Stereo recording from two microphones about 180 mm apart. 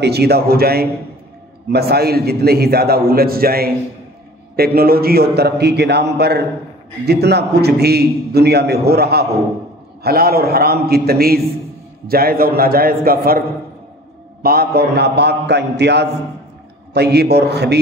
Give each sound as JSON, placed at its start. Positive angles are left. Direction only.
{"t": 0.0, "sound": "a man's voice", "side_deg": -65}
{"t": 14.4, "sound": "a man's voice", "side_deg": -55}